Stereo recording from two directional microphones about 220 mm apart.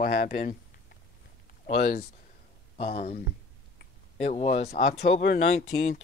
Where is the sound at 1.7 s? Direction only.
40° left (ahead or behind).